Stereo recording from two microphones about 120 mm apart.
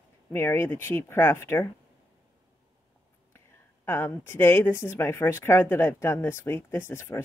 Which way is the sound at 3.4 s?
20° left (ahead or behind).